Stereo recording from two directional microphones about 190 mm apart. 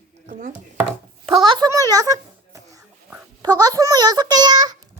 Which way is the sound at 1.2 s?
25° right (ahead or behind).